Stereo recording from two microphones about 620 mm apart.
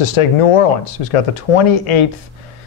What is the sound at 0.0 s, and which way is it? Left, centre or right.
Speech, left.